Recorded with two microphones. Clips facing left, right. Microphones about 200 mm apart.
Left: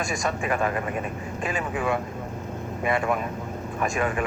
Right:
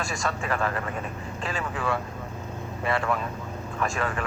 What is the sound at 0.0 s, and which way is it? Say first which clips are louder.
Speech: left 3 dB; 15° left (ahead or behind).